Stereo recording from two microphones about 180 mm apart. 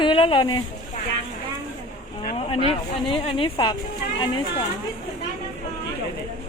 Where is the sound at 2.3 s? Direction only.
30° left (ahead or behind).